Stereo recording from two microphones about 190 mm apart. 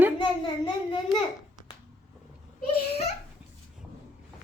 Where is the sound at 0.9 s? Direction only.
25° left (ahead or behind).